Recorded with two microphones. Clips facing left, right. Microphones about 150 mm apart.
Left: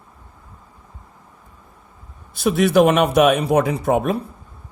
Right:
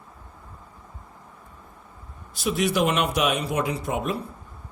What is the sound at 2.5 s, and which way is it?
Speech, 55° left (ahead or behind).